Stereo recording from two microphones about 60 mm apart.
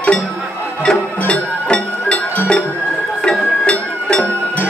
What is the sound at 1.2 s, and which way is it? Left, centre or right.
Music, left.